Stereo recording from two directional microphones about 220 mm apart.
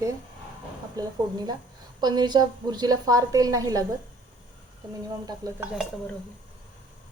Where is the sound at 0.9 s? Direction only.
20° right (ahead or behind).